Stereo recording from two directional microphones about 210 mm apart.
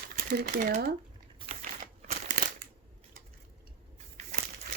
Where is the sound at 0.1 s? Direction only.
40° right (ahead or behind).